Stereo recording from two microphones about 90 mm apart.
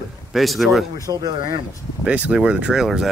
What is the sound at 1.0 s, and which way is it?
Speech, 45° right (ahead or behind).